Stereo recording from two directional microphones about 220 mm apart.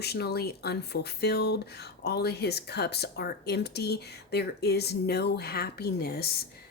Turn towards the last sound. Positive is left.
turn(degrees=45)  # may be behind; listen again after turning